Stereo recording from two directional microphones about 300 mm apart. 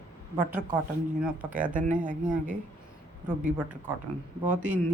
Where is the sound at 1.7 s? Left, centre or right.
Right.